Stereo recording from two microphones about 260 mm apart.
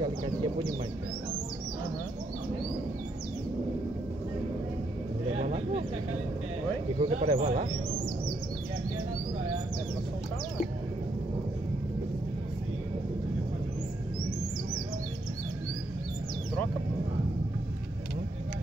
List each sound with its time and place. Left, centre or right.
0.0 s bird: centre
5.4 s a sound: right
7.0 s speech: right